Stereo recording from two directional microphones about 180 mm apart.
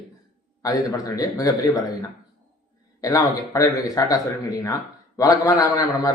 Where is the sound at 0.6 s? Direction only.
20° left (ahead or behind).